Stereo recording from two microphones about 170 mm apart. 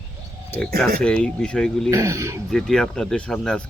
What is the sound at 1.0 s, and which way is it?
Speech, 5° left (ahead or behind).